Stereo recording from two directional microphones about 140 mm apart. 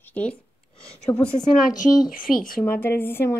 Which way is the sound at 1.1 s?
20° left (ahead or behind).